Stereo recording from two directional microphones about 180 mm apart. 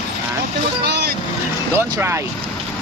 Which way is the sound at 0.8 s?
70° right (ahead or behind).